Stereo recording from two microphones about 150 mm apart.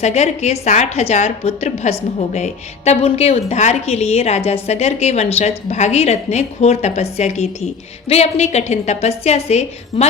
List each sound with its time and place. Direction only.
0.0 s a woman's voice: 45° left (ahead or behind)